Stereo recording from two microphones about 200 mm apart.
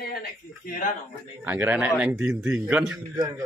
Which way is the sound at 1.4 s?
10° right (ahead or behind).